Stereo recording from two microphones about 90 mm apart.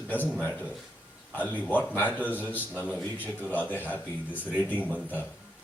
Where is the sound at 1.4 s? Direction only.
20° left (ahead or behind).